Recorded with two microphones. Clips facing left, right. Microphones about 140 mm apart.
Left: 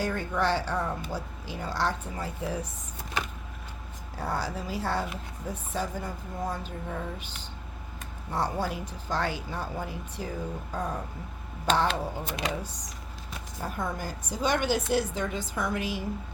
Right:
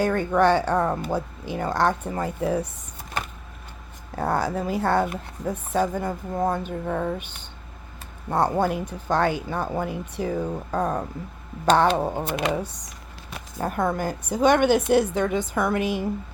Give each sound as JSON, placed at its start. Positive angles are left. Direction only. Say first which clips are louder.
{"t": 0.0, "sound": "speech", "louder": "right 8 dB", "side_deg": -60}
{"t": 4.1, "sound": "speech", "louder": "right 8 dB", "side_deg": -55}
{"t": 11.7, "sound": "speech", "louder": "right 7 dB", "side_deg": -60}